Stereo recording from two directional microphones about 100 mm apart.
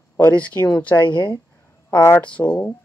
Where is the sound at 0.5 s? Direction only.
25° left (ahead or behind).